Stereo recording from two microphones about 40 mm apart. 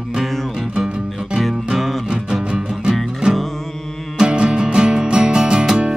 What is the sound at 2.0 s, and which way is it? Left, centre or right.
Music, centre.